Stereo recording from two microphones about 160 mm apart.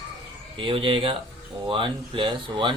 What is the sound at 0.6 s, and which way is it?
Speech, 30° right (ahead or behind).